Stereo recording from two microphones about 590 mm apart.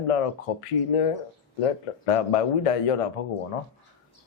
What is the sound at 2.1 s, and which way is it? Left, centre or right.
Speech, left.